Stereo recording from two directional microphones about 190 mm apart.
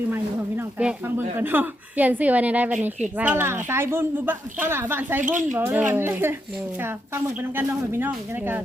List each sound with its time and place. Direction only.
0.1 s a woman's voice: 10° right (ahead or behind)
5.2 s speech: 40° right (ahead or behind)
5.5 s a woman's voice: 10° right (ahead or behind)